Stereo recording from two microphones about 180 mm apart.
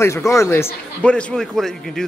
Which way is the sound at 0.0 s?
15° left (ahead or behind).